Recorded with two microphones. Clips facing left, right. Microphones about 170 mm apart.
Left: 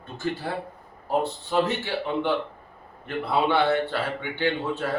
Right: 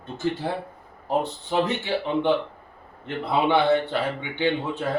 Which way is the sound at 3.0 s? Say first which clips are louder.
Right 1 dB; 20° right (ahead or behind).